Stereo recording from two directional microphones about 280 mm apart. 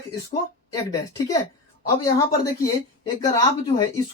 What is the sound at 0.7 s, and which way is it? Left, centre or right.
Speech, centre.